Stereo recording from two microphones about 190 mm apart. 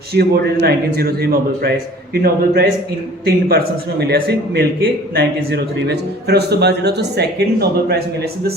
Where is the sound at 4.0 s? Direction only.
55° right (ahead or behind).